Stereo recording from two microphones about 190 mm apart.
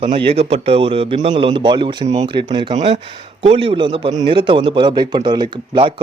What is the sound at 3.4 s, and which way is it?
A man's voice, 30° right (ahead or behind).